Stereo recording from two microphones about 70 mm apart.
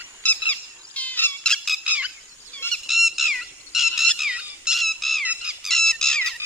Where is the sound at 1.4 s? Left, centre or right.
Centre.